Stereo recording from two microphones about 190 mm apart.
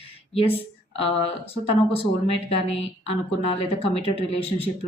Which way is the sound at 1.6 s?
30° left (ahead or behind).